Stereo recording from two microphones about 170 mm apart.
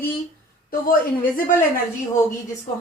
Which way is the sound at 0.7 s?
55° left (ahead or behind).